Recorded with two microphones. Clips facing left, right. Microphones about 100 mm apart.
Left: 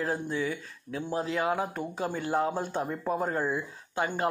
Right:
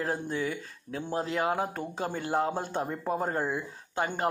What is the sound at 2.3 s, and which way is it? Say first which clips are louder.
Speech: even; 30° right (ahead or behind).